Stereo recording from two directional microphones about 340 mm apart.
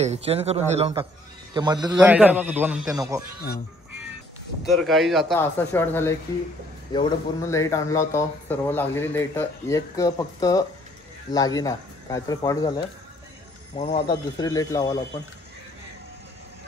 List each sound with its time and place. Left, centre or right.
0.0 s a man's voice: centre
4.7 s a man's voice: centre